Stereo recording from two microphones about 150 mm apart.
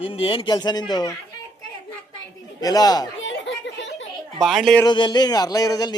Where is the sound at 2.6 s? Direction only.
25° left (ahead or behind).